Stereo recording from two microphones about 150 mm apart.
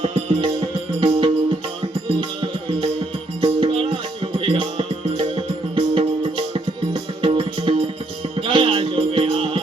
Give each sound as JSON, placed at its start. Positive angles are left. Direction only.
{"t": 0.0, "sound": "music", "side_deg": -40}
{"t": 3.4, "sound": "music", "side_deg": -35}